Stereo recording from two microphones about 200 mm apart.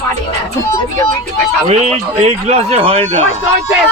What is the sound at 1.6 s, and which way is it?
Speech, 30° right (ahead or behind).